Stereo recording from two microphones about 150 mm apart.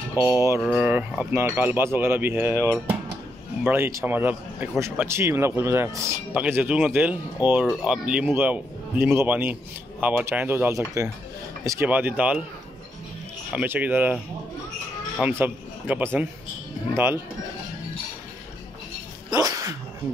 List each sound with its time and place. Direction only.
0.1 s mantra: 25° left (ahead or behind)
0.7 s a man's voice: 10° right (ahead or behind)
13.5 s a man's voice: 10° right (ahead or behind)
15.1 s a man's voice: 10° right (ahead or behind)
19.3 s speech: 20° right (ahead or behind)